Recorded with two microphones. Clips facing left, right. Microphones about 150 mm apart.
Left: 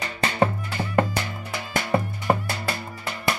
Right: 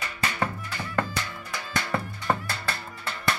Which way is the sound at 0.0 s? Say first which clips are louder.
Left 6 dB; 30° left (ahead or behind).